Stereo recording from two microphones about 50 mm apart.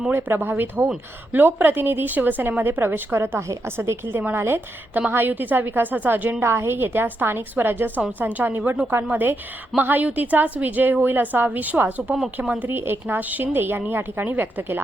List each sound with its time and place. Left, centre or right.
0.1 s speech: right
6.4 s a woman's voice: right
12.7 s a woman's voice: right